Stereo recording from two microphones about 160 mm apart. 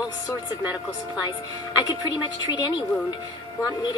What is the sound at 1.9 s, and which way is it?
A woman's voice, 25° left (ahead or behind).